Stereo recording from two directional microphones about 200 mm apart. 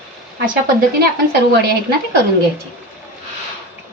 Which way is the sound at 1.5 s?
50° right (ahead or behind).